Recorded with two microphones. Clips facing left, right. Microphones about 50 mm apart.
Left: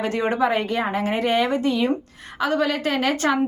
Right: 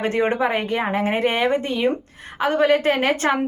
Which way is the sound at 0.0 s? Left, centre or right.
Right.